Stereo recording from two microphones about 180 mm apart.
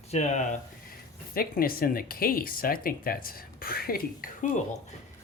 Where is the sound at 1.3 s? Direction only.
55° left (ahead or behind).